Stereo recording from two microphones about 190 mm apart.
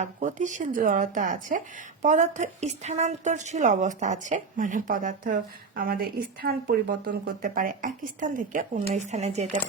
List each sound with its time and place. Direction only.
0.0 s speech: 40° right (ahead or behind)